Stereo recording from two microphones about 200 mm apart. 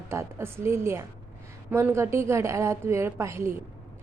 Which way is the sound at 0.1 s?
15° right (ahead or behind).